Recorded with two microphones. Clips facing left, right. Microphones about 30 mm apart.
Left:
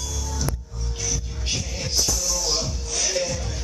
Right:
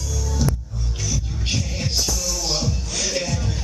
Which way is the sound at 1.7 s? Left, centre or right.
Right.